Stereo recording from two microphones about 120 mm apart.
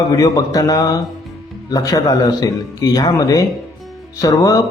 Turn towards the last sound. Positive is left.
turn(degrees=30)  # may be behind; listen again after turning